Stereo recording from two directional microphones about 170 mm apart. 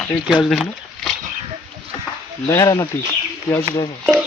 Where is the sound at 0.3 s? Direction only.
Centre (ahead or behind).